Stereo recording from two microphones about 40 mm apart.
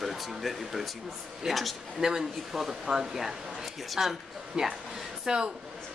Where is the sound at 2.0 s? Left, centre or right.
Centre.